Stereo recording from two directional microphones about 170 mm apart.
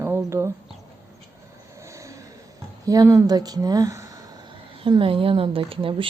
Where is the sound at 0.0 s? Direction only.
15° right (ahead or behind).